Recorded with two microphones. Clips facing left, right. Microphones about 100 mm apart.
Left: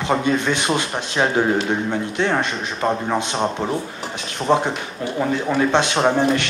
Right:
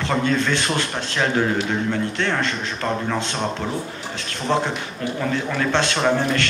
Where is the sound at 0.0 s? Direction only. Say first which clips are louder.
Left 2 dB; 15° left (ahead or behind).